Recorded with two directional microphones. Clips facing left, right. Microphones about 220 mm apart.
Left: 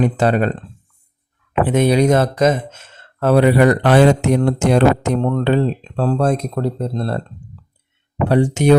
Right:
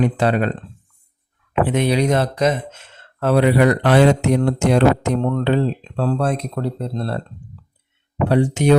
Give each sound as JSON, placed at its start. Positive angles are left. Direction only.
{"t": 0.0, "sound": "speech", "side_deg": 45}
{"t": 1.7, "sound": "speech", "side_deg": 45}
{"t": 8.3, "sound": "speech", "side_deg": 45}